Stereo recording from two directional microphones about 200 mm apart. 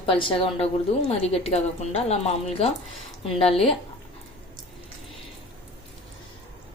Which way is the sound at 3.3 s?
30° left (ahead or behind).